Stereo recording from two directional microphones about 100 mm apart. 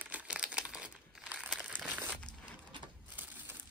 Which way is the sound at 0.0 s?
15° right (ahead or behind).